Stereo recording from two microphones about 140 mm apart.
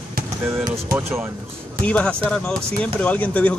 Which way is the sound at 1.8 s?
10° left (ahead or behind).